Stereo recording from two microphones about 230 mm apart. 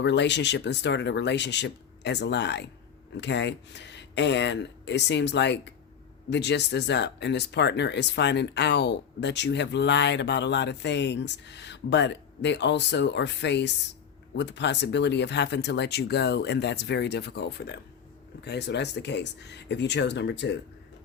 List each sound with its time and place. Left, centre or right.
0.0 s speech: left